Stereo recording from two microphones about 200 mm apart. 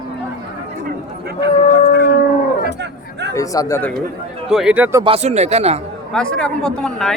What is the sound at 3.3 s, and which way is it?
Speech, 15° left (ahead or behind).